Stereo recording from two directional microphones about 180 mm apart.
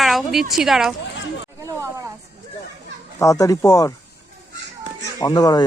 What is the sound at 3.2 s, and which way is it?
Speech, 20° left (ahead or behind).